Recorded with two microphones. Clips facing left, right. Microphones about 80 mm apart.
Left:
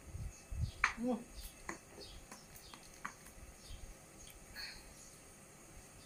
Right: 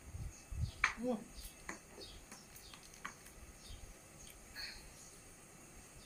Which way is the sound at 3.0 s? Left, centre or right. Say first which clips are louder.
Left 2 dB; left.